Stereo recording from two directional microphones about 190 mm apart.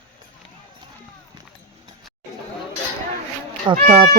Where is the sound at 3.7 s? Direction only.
40° right (ahead or behind).